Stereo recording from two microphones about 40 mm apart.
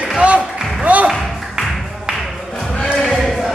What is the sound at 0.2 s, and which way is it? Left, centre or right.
Music, right.